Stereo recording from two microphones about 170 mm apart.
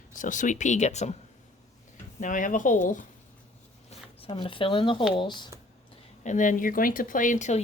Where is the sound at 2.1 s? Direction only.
50° left (ahead or behind).